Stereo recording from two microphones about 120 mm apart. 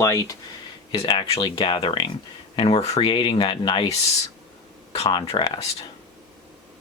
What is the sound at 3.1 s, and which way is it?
Speech, 45° left (ahead or behind).